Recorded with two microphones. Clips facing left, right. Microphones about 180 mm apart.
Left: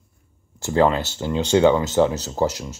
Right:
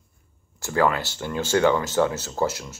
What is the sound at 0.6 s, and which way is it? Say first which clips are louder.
Speech: left 4 dB; 20° left (ahead or behind).